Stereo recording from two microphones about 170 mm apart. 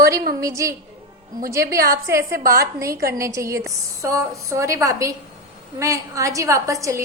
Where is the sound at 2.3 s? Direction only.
60° right (ahead or behind).